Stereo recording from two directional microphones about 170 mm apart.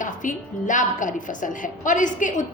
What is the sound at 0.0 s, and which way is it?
A woman's voice, 50° left (ahead or behind).